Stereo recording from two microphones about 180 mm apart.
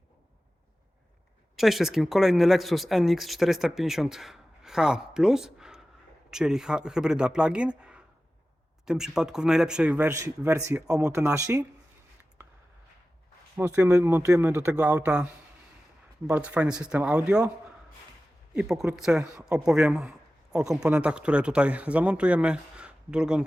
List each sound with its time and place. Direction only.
1.5 s a man's voice: centre (ahead or behind); by 11.6 s 15° right (ahead or behind)
13.6 s a man's voice: 10° right (ahead or behind)
18.5 s speech: 5° right (ahead or behind)